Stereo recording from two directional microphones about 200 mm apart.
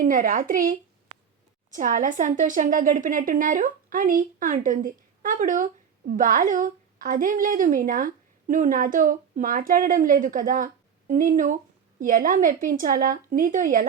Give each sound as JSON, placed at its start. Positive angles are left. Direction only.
{"t": 0.0, "sound": "a woman's voice", "side_deg": -40}